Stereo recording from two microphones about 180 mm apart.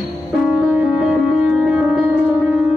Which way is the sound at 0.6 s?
5° right (ahead or behind).